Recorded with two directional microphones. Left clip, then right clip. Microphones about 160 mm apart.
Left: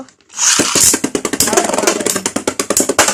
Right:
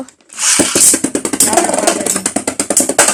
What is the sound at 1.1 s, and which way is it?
Music, 20° left (ahead or behind).